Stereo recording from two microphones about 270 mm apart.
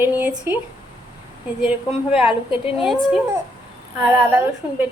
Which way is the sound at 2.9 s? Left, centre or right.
Centre.